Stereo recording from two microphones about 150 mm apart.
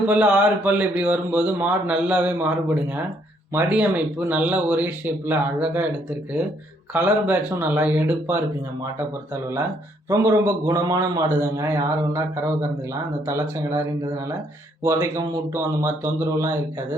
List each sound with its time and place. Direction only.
0.1 s speech: 10° right (ahead or behind)
6.9 s speech: 15° right (ahead or behind)
10.1 s a man's voice: 20° right (ahead or behind)
14.8 s a man's voice: 20° right (ahead or behind)